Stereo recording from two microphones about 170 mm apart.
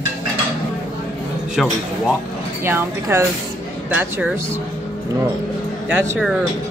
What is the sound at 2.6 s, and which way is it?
Speech, 15° right (ahead or behind).